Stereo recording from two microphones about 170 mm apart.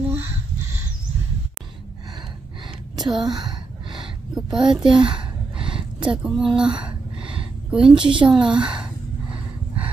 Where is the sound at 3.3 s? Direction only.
25° right (ahead or behind).